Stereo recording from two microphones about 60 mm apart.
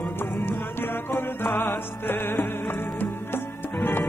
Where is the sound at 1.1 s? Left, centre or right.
Left.